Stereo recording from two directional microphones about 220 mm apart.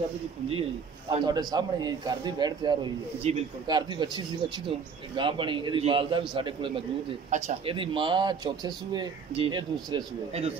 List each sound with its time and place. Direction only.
1.1 s a man's voice: 20° right (ahead or behind)